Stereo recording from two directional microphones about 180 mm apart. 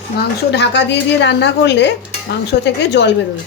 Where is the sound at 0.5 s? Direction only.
70° left (ahead or behind).